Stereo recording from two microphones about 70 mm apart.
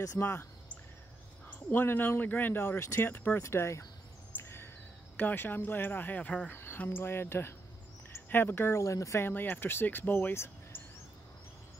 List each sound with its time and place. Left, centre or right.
0.2 s speech: left
1.5 s speech: left
3.4 s speech: left
4.4 s a sound: left
5.1 s speech: left
6.5 s a sound: left
6.8 s speech: left
9.2 s speech: left